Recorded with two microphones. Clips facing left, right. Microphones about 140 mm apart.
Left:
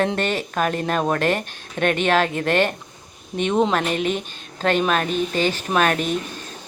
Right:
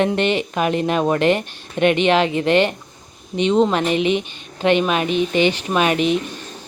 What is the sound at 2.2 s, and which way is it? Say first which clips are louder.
Speech: right 5 dB; 50° left (ahead or behind).